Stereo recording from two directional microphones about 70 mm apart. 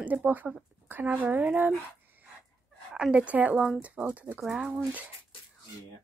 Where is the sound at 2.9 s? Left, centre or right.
Centre.